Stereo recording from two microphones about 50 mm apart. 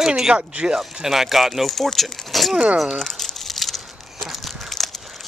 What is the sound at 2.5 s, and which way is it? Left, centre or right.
Speech, right.